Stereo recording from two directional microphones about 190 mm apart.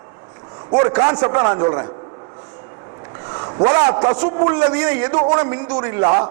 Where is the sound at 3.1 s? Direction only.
20° right (ahead or behind).